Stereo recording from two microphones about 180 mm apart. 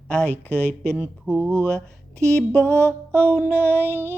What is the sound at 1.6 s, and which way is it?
Speech, 5° left (ahead or behind).